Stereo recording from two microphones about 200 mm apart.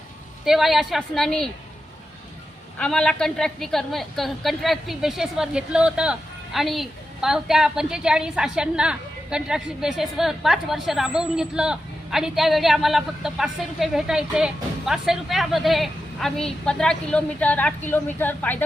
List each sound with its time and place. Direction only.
0.4 s a woman's voice: centre (ahead or behind)
2.7 s a woman's voice: 5° left (ahead or behind)